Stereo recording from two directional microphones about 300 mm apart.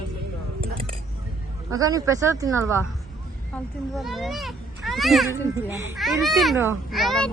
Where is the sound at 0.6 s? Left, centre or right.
Centre.